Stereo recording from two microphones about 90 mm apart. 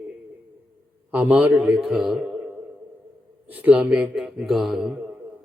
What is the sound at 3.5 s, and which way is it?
Speech, 20° right (ahead or behind).